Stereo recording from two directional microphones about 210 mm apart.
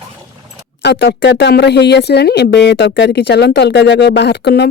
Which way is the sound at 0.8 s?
55° left (ahead or behind).